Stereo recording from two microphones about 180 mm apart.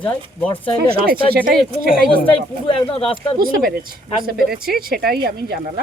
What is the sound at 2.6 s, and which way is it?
Speech, 30° left (ahead or behind).